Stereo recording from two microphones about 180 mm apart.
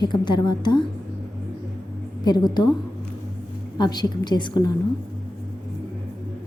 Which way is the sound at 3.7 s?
25° left (ahead or behind).